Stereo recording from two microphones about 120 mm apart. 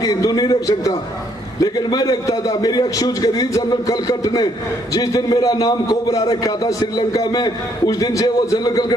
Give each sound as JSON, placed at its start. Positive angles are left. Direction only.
{"t": 0.0, "sound": "a man's voice", "side_deg": 30}